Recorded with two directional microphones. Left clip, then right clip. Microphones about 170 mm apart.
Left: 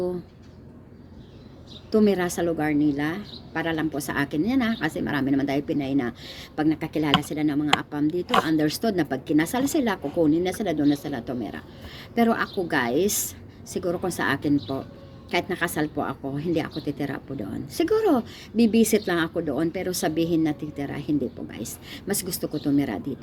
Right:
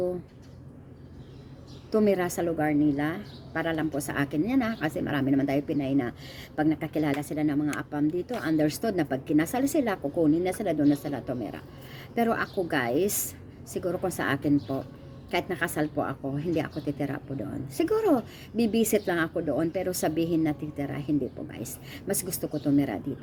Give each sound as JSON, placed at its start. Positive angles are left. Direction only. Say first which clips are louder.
{"t": 1.9, "sound": "a woman's voice", "louder": "left 3 dB", "side_deg": -15}